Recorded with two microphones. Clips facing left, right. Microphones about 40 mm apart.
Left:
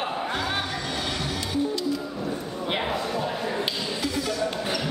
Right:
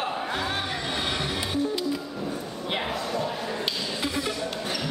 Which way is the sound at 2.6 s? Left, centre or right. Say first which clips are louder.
Left 2 dB; centre.